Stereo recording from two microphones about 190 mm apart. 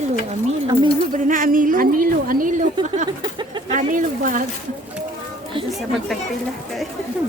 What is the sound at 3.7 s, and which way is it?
Speech, 45° right (ahead or behind).